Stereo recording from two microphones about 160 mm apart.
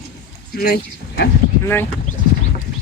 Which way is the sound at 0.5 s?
85° left.